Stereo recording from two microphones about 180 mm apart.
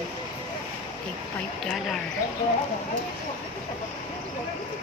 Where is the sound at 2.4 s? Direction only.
30° left (ahead or behind).